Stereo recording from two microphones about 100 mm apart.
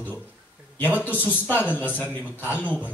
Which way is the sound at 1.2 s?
20° left (ahead or behind).